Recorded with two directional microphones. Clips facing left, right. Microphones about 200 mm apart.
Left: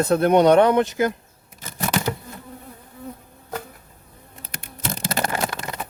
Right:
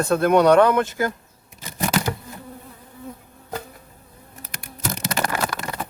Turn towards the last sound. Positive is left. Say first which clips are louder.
# right 1 dB
turn(degrees=20)  # may be behind; listen again after turning